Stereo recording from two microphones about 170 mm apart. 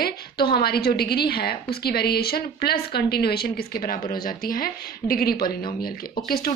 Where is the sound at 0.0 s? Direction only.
65° left (ahead or behind).